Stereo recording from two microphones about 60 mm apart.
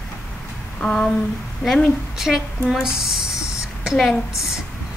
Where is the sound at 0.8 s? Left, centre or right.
Centre.